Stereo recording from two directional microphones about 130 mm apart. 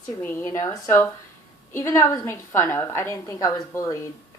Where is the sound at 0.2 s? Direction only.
20° left (ahead or behind).